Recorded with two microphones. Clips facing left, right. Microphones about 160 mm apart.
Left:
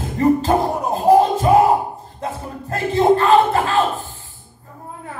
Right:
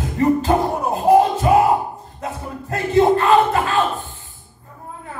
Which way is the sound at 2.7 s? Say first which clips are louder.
Even; 35° left (ahead or behind).